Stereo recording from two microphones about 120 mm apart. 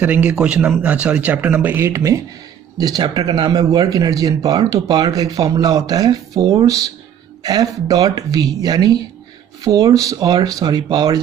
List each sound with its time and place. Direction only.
0.0 s speech: 15° right (ahead or behind)
2.8 s speech: 35° right (ahead or behind)